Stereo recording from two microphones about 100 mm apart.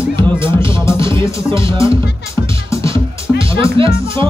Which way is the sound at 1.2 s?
30° left (ahead or behind).